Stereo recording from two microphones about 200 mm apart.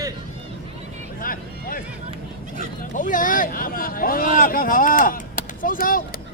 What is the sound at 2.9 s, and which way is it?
Speech, 40° left (ahead or behind).